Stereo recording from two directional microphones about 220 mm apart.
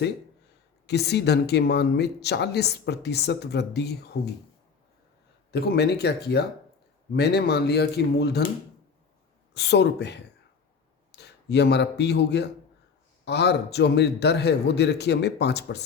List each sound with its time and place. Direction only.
0.9 s speech: 50° left (ahead or behind)
5.5 s speech: 45° left (ahead or behind)
9.6 s speech: 50° left (ahead or behind)